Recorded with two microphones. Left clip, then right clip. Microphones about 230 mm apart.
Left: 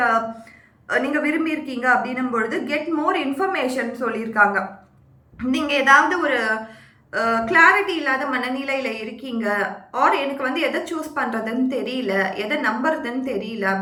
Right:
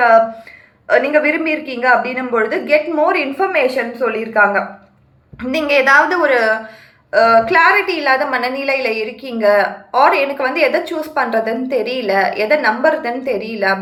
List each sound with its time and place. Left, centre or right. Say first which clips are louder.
0.9 s a woman's voice: right 8 dB; centre